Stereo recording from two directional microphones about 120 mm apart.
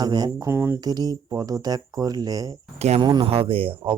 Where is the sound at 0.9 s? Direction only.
35° right (ahead or behind).